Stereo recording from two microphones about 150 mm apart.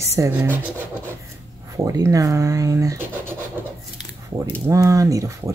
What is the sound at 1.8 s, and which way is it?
Speech, 20° right (ahead or behind).